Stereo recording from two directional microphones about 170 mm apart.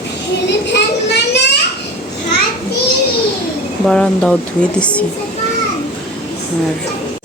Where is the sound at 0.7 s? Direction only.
80° left.